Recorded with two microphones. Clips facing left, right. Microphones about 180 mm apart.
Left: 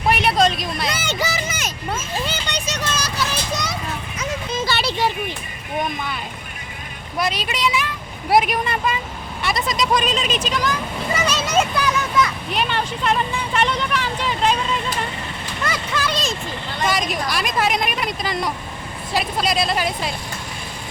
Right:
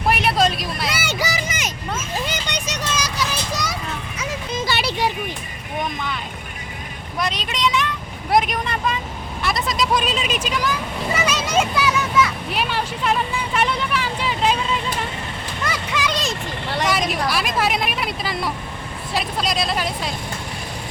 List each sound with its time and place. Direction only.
0.1 s vehicle: centre (ahead or behind)
2.2 s children playing: 15° right (ahead or behind)
4.2 s a sound: 15° right (ahead or behind)
7.2 s vehicle: 5° left (ahead or behind)
9.4 s speech: centre (ahead or behind)
11.3 s a sound: 10° right (ahead or behind)
15.6 s vehicle: 10° right (ahead or behind)
16.6 s vehicle: 75° right (ahead or behind)
16.9 s speech: 5° right (ahead or behind)